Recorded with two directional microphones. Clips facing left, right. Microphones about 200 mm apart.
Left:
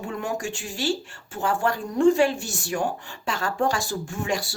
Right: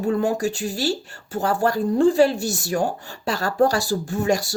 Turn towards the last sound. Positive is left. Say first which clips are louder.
# right 6 dB
turn(degrees=-40)  # may be behind; listen again after turning